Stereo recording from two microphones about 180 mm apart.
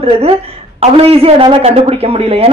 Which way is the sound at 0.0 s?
35° right (ahead or behind).